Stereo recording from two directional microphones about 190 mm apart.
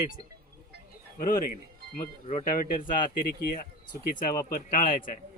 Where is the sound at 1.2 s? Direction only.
50° left (ahead or behind).